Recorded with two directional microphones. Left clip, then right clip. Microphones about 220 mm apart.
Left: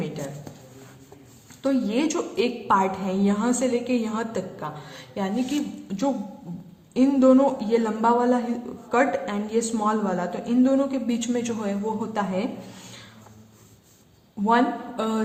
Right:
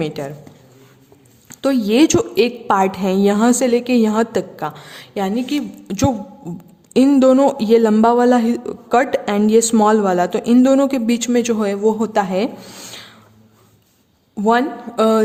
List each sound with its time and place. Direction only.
0.0 s a woman's voice: 50° right (ahead or behind)
1.5 s a woman's voice: 50° right (ahead or behind)
6.9 s a woman's voice: 50° right (ahead or behind)
14.4 s speech: 50° right (ahead or behind)